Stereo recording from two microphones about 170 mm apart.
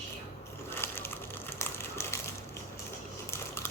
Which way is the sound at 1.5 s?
15° left (ahead or behind).